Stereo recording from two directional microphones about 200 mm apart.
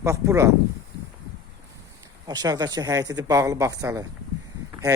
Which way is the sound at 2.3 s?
20° right (ahead or behind).